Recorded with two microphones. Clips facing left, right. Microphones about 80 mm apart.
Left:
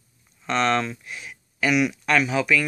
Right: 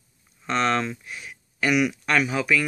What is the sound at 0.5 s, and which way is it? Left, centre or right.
Speech, centre.